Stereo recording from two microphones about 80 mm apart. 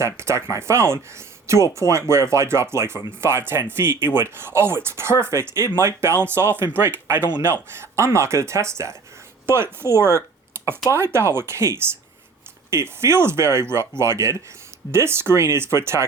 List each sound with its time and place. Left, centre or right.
0.0 s speech: right